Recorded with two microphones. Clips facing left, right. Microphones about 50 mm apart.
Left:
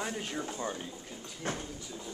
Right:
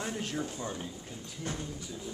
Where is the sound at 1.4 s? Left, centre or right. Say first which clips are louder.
Left 2 dB; left.